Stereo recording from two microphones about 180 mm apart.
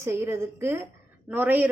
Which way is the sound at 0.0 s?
15° right (ahead or behind).